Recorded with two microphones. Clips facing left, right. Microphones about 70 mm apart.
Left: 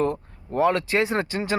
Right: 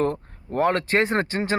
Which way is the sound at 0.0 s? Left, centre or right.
Right.